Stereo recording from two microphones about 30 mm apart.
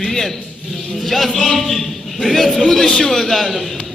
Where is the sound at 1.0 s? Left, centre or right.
Centre.